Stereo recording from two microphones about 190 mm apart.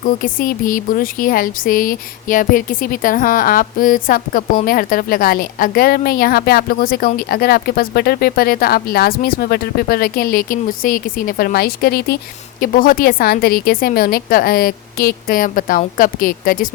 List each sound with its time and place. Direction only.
0.0 s speech: 45° left (ahead or behind)